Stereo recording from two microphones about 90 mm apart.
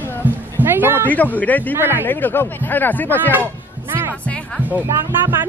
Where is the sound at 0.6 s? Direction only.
25° right (ahead or behind).